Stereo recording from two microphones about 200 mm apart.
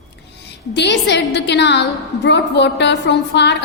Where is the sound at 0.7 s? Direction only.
60° left (ahead or behind).